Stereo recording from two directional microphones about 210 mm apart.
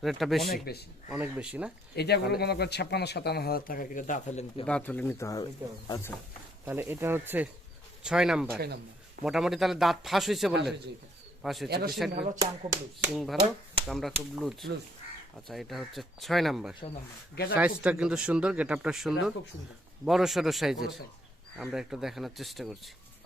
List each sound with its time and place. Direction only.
0.0 s speech: centre (ahead or behind)
0.4 s a man's voice: 50° left (ahead or behind)
1.0 s speech: 10° right (ahead or behind)
2.0 s a man's voice: 50° left (ahead or behind); by 4.6 s 30° left (ahead or behind)
4.6 s speech: 5° left (ahead or behind)
6.7 s speech: 10° right (ahead or behind)
8.5 s speech: 50° right (ahead or behind)
9.2 s speech: centre (ahead or behind)
12.1 s speech: 30° right (ahead or behind)
12.4 s speech: 15° right (ahead or behind)
13.1 s speech: centre (ahead or behind)